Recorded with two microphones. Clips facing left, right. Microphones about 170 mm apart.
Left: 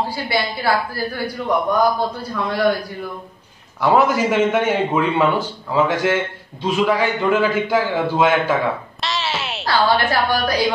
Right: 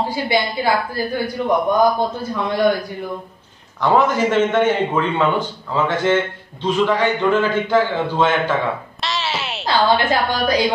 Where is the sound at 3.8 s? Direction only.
10° left (ahead or behind).